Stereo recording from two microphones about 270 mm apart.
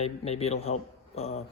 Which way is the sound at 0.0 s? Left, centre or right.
Left.